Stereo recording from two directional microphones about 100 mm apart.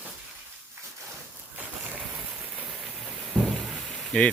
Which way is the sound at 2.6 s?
5° right (ahead or behind).